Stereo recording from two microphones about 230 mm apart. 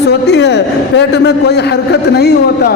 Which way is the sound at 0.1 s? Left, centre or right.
Left.